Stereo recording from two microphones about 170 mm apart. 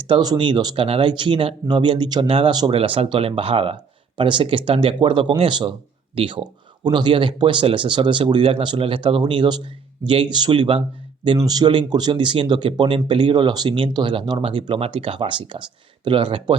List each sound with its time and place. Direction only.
0.0 s speech: 25° right (ahead or behind)